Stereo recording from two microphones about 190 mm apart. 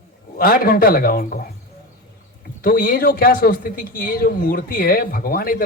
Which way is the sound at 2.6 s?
50° left (ahead or behind).